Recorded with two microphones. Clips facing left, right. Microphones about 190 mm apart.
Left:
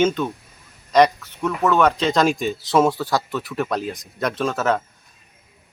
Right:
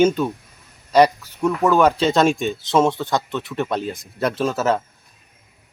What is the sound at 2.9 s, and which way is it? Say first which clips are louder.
Speech: even; 20° right (ahead or behind).